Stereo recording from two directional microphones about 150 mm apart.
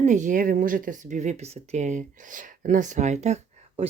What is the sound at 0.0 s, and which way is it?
A woman's voice, 55° right (ahead or behind).